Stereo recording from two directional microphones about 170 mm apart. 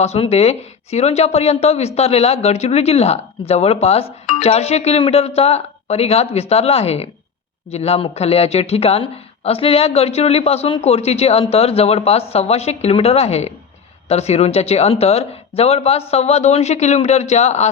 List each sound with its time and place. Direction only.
0.0 s speech: 40° left (ahead or behind)